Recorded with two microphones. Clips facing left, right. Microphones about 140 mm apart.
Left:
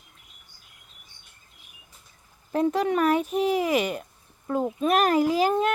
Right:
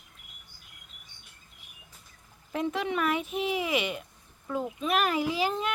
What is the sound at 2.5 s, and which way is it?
Speech, 40° left (ahead or behind).